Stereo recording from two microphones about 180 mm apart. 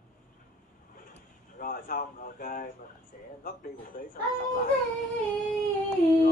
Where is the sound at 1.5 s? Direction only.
50° left (ahead or behind).